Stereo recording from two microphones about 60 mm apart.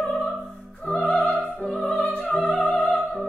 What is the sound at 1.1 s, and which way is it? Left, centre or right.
Music, left.